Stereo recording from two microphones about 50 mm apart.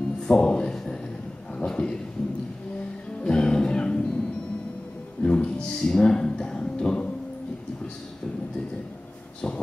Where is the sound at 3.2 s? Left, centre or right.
Centre.